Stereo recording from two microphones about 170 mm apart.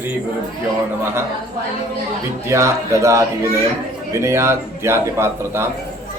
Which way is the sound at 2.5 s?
15° right (ahead or behind).